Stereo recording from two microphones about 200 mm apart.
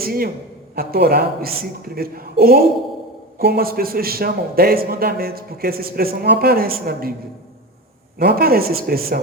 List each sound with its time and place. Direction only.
0.0 s a man's voice: 45° right (ahead or behind)
8.2 s a man's voice: 50° right (ahead or behind)